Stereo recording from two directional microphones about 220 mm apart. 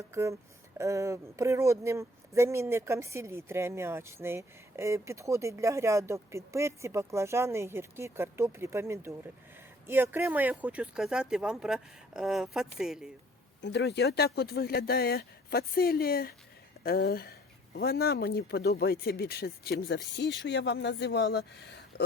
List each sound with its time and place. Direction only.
0.1 s speech: 15° right (ahead or behind)
13.6 s speech: 50° left (ahead or behind)